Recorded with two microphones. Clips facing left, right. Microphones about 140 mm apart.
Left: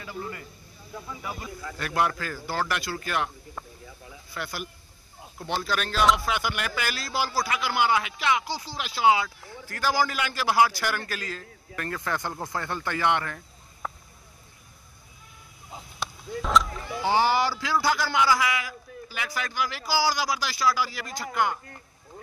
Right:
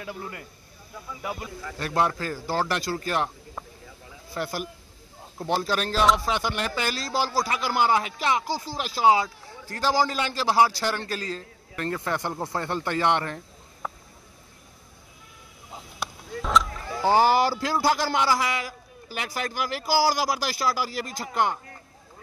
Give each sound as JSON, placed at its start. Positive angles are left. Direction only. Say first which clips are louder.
{"t": 0.0, "sound": "speech", "louder": "even", "side_deg": -65}
{"t": 1.8, "sound": "a man's voice", "louder": "right 2 dB", "side_deg": -30}
{"t": 4.3, "sound": "a man's voice", "louder": "right 5 dB", "side_deg": -35}
{"t": 13.8, "sound": "a sound", "louder": "right 1 dB", "side_deg": -5}
{"t": 16.0, "sound": "a sound", "louder": "left 1 dB", "side_deg": 0}
{"t": 17.0, "sound": "a man's voice", "louder": "right 3 dB", "side_deg": -40}